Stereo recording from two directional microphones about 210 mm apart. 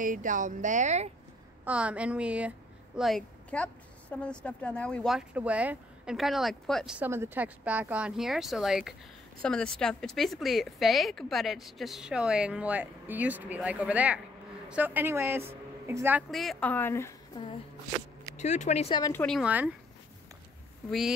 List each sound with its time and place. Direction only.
0.0 s speech: 40° right (ahead or behind)
1.6 s a woman's voice: 5° right (ahead or behind); by 17.6 s 20° left (ahead or behind)
18.3 s speech: 35° left (ahead or behind)
19.1 s a woman's voice: centre (ahead or behind)